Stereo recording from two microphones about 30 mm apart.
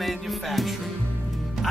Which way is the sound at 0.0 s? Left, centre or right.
Centre.